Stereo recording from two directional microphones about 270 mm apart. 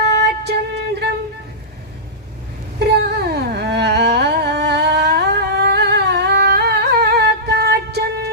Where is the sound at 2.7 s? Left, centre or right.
Right.